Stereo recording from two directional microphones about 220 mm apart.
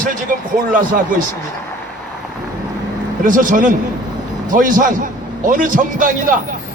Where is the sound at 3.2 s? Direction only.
35° right (ahead or behind).